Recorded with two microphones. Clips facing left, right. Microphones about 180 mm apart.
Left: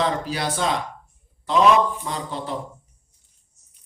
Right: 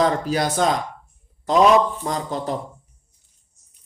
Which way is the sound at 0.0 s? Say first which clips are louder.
Right 4 dB; 45° right (ahead or behind).